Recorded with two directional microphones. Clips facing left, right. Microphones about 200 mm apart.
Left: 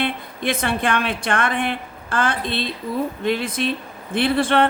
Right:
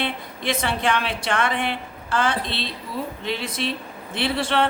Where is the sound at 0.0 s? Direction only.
55° left (ahead or behind).